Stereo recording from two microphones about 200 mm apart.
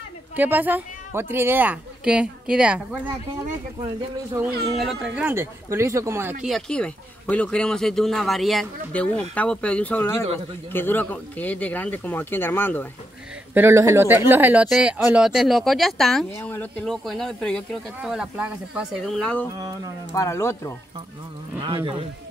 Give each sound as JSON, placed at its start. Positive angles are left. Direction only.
{"t": 0.4, "sound": "a woman's voice", "side_deg": -10}
{"t": 4.3, "sound": "a woman's voice", "side_deg": -10}
{"t": 6.4, "sound": "speech", "side_deg": 0}
{"t": 13.5, "sound": "speech", "side_deg": -10}
{"t": 19.5, "sound": "a woman's voice", "side_deg": -20}
{"t": 20.2, "sound": "speech", "side_deg": 15}